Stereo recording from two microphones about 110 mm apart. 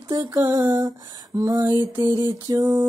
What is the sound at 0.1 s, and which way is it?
Music, 35° right (ahead or behind).